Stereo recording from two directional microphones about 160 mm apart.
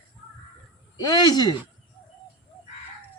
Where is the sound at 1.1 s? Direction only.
25° left (ahead or behind).